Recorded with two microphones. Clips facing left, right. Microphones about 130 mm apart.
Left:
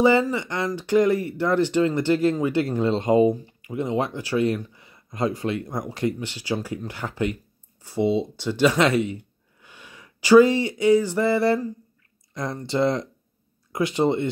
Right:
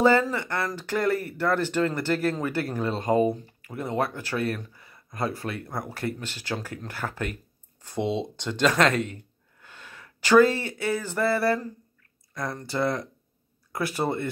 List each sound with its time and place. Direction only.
0.0 s speech: 15° left (ahead or behind)